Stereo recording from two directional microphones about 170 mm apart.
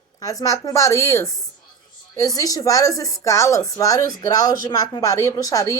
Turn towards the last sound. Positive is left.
turn(degrees=20)  # may be behind; listen again after turning